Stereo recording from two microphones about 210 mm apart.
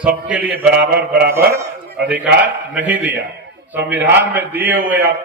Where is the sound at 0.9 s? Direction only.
45° right (ahead or behind).